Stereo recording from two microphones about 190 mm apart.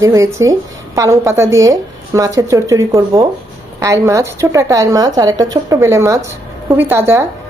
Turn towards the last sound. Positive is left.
turn(degrees=-10)  # may be behind; listen again after turning